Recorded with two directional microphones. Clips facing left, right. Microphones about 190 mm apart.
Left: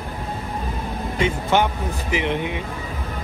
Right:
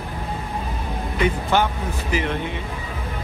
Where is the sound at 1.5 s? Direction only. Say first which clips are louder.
Left 1 dB; 20° left (ahead or behind).